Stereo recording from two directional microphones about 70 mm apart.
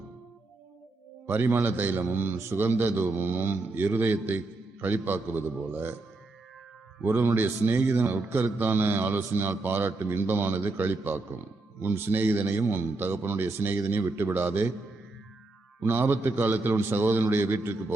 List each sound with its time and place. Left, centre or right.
1.3 s a man's voice: right
7.0 s a man's voice: right
15.8 s a man's voice: right